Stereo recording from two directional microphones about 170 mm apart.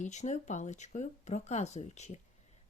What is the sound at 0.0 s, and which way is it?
A woman's voice, 45° left (ahead or behind).